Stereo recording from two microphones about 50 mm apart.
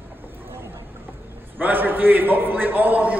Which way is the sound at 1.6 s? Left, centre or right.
Right.